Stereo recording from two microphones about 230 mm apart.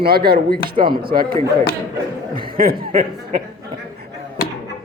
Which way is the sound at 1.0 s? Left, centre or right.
Right.